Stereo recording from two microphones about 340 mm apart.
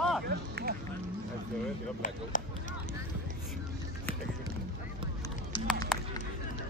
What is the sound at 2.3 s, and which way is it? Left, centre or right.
Speech, left.